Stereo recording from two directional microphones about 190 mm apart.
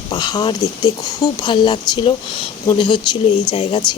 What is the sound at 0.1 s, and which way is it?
Speech, 20° left (ahead or behind).